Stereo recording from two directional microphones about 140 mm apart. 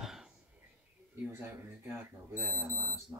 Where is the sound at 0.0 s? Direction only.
Centre (ahead or behind).